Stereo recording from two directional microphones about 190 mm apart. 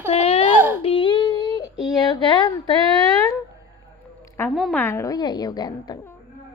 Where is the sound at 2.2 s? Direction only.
25° left (ahead or behind).